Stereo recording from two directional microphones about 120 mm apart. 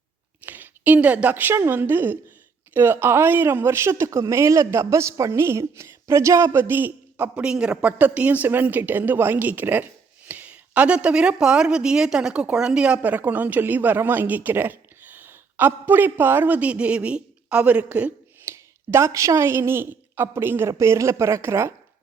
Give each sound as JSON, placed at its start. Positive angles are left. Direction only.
{"t": 0.4, "sound": "a woman's voice", "side_deg": -15}
{"t": 18.5, "sound": "a woman's voice", "side_deg": -20}